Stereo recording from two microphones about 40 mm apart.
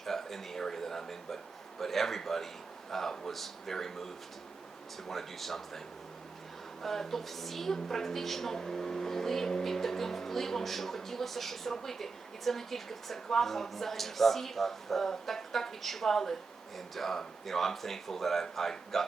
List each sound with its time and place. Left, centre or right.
0.0 s a woman's voice: centre
6.8 s a woman's voice: centre